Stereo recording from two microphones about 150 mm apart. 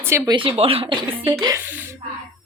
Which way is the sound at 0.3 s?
35° right (ahead or behind).